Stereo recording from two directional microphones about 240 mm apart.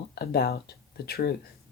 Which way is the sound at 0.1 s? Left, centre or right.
Left.